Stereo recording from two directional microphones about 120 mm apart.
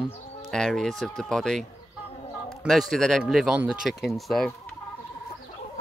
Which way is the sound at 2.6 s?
Centre (ahead or behind).